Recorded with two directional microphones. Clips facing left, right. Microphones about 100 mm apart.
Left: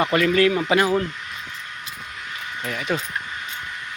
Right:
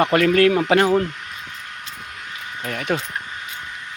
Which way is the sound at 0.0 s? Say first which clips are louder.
Right 3 dB; 50° right (ahead or behind).